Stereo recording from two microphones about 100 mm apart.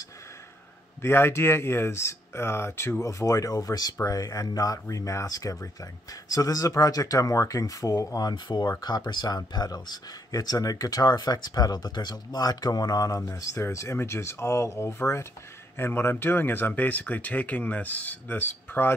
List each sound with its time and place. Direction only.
1.0 s speech: 25° left (ahead or behind)